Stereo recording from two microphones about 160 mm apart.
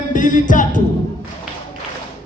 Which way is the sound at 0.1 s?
55° left (ahead or behind).